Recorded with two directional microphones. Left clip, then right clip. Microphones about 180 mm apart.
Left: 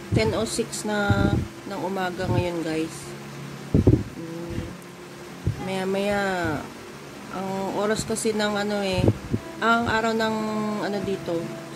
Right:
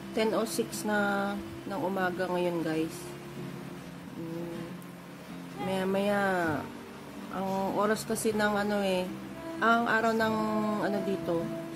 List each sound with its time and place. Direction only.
0.1 s speech: 10° right (ahead or behind)
5.7 s speech: 10° right (ahead or behind)
7.6 s speech: 15° right (ahead or behind)